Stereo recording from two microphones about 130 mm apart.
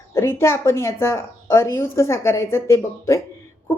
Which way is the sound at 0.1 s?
20° left (ahead or behind).